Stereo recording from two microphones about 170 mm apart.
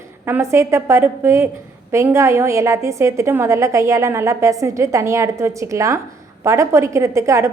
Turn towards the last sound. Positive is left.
turn(degrees=-15)  # may be behind; listen again after turning